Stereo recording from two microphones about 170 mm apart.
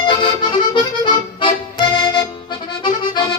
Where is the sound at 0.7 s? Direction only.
30° left (ahead or behind).